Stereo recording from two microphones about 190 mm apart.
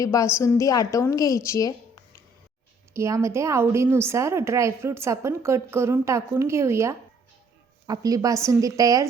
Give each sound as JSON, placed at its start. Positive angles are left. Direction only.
{"t": 0.0, "sound": "a woman's voice", "side_deg": 15}
{"t": 2.9, "sound": "a woman's voice", "side_deg": -15}